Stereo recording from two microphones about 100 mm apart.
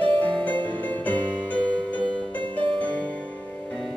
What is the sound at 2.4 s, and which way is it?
Music, 55° right (ahead or behind).